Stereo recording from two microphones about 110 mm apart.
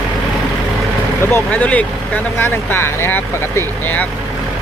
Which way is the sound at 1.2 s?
15° left (ahead or behind).